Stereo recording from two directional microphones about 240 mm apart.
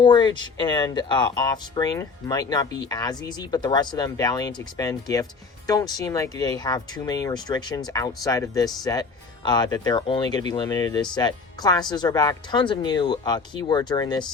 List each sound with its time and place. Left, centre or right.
0.0 s speech: centre